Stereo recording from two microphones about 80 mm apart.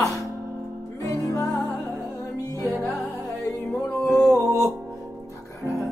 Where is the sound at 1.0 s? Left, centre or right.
Left.